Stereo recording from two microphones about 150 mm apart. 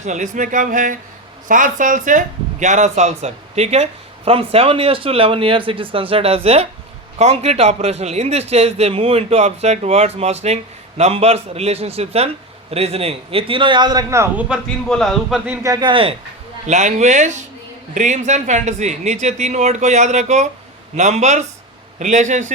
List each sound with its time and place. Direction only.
0.0 s a man's voice: 55° right (ahead or behind); by 14.4 s 20° right (ahead or behind)
14.8 s speech: 5° left (ahead or behind)
15.6 s speech: 25° right (ahead or behind)
16.6 s a man's voice: 50° right (ahead or behind)